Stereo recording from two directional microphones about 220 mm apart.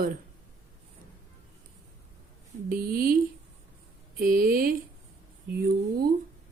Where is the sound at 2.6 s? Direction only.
40° right (ahead or behind).